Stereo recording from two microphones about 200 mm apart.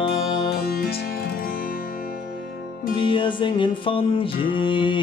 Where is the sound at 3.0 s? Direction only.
25° left (ahead or behind).